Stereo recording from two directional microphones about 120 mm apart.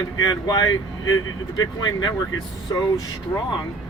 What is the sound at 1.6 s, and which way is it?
Speech, 35° left (ahead or behind).